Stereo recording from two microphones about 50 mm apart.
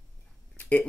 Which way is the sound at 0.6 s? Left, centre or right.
Left.